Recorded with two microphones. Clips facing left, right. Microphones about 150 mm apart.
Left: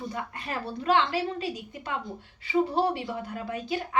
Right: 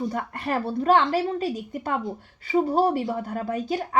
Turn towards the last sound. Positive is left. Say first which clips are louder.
# right 4 dB
turn(degrees=-40)  # may be behind; listen again after turning